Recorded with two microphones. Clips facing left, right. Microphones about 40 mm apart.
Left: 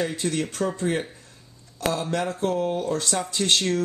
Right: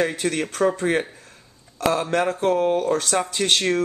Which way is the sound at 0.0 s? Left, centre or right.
Right.